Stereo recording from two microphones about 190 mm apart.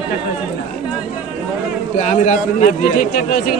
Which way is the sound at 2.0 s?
40° left (ahead or behind).